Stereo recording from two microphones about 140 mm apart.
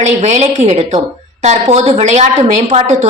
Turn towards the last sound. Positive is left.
turn(degrees=-55)  # may be behind; listen again after turning